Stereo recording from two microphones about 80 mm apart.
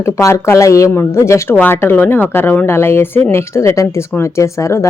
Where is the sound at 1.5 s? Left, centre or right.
Left.